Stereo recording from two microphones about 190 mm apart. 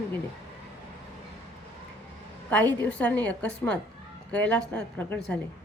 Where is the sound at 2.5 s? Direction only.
10° left (ahead or behind).